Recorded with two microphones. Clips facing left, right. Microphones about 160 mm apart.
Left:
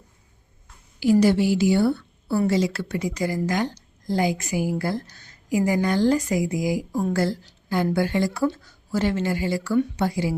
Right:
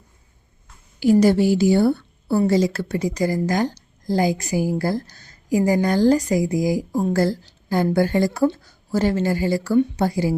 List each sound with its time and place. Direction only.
0.9 s a woman's voice: 45° right (ahead or behind)